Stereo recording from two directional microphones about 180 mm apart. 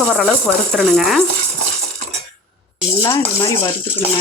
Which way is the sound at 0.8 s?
Centre (ahead or behind).